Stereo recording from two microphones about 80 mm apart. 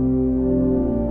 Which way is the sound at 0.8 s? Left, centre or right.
Right.